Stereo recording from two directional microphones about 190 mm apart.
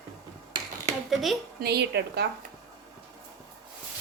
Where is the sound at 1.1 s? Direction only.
Centre (ahead or behind).